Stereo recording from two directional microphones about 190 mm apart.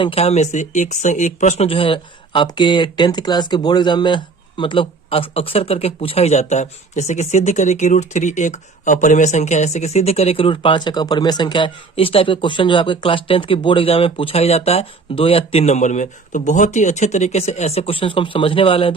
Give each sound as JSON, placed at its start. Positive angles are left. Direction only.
{"t": 0.0, "sound": "speech", "side_deg": 30}